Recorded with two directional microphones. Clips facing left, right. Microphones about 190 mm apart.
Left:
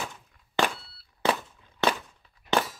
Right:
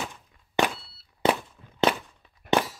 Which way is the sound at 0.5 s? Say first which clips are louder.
Right 2 dB; 20° right (ahead or behind).